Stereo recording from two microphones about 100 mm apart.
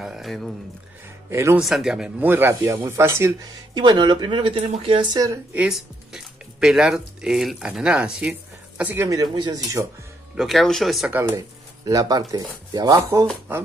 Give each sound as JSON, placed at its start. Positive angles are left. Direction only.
{"t": 0.0, "sound": "a sound", "side_deg": -5}
{"t": 1.3, "sound": "speech", "side_deg": -30}
{"t": 1.6, "sound": "speech", "side_deg": 0}
{"t": 3.7, "sound": "speech", "side_deg": -45}
{"t": 5.1, "sound": "speech", "side_deg": -35}
{"t": 5.7, "sound": "speech", "side_deg": -5}
{"t": 8.9, "sound": "speech", "side_deg": -30}
{"t": 9.2, "sound": "speech", "side_deg": -45}
{"t": 10.3, "sound": "speech", "side_deg": 0}
{"t": 11.1, "sound": "speech", "side_deg": -20}
{"t": 11.3, "sound": "speech", "side_deg": -40}